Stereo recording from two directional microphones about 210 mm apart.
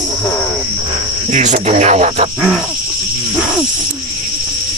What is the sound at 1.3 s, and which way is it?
Speech, 35° right (ahead or behind).